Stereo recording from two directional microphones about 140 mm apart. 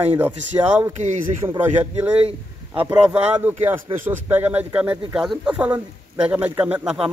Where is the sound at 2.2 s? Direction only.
40° right (ahead or behind).